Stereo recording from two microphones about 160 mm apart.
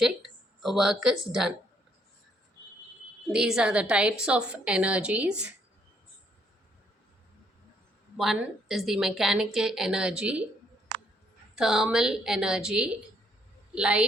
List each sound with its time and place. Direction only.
0.0 s speech: centre (ahead or behind)
3.3 s a woman's voice: 5° right (ahead or behind)
8.1 s a woman's voice: centre (ahead or behind)
11.5 s a woman's voice: 5° right (ahead or behind)